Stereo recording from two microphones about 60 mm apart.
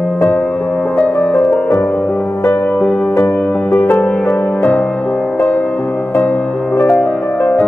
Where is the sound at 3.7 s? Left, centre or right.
Left.